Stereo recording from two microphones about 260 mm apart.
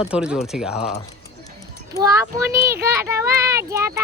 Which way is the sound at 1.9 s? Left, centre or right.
Centre.